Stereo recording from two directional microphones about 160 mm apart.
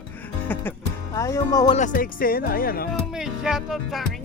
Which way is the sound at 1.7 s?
55° left (ahead or behind).